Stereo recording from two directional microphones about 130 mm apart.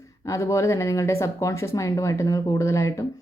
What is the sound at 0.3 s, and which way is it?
Speech, 25° left (ahead or behind).